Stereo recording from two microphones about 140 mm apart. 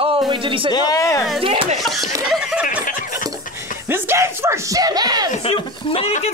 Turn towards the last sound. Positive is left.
turn(degrees=45)  # may be behind; listen again after turning